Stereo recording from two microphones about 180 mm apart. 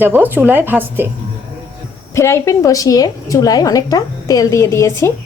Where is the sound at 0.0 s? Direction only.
10° right (ahead or behind).